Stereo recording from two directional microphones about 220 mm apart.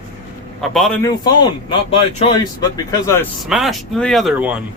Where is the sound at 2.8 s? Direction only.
15° left (ahead or behind).